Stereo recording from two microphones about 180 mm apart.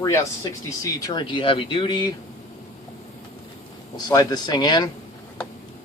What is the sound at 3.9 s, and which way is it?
Speech, 20° left (ahead or behind).